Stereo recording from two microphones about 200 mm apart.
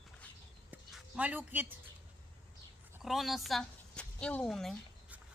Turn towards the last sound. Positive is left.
turn(degrees=0)  # may be behind; listen again after turning